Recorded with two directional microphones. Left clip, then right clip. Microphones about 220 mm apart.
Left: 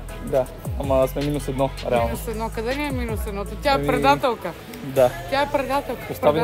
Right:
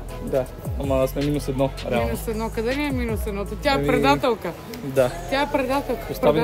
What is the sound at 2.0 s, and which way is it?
Speech, 15° right (ahead or behind).